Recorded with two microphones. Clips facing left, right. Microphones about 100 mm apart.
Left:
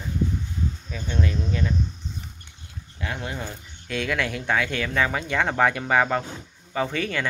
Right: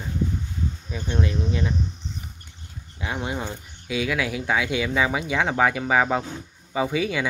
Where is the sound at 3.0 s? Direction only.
20° right (ahead or behind).